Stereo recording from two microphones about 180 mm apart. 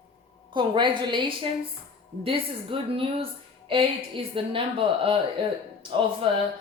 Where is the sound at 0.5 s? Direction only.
25° right (ahead or behind).